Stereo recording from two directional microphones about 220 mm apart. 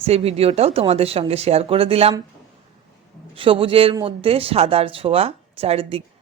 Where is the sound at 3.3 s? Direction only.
25° right (ahead or behind).